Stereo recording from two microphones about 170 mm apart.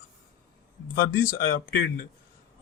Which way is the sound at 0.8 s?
55° left (ahead or behind).